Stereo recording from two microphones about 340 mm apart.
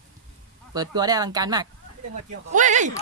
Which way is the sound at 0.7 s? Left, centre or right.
Centre.